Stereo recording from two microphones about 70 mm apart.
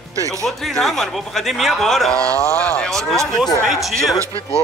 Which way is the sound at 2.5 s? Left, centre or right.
Centre.